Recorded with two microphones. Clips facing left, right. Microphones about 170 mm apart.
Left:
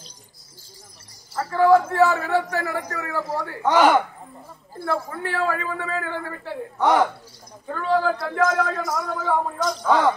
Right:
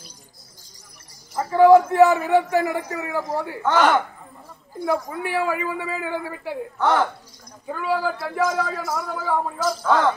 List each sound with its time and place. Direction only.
1.3 s a man's voice: 15° right (ahead or behind)
3.6 s speech: 10° left (ahead or behind)
4.7 s a man's voice: 15° right (ahead or behind)
6.8 s speech: 15° left (ahead or behind)
7.6 s a man's voice: 10° right (ahead or behind)